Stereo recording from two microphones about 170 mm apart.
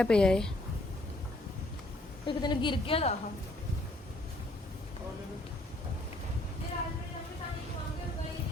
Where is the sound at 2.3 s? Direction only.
25° left (ahead or behind).